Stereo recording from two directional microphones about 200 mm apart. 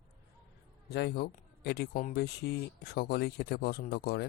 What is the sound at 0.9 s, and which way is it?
Speech, 55° left (ahead or behind).